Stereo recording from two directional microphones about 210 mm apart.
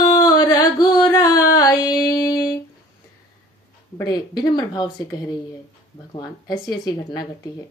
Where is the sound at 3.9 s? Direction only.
20° left (ahead or behind).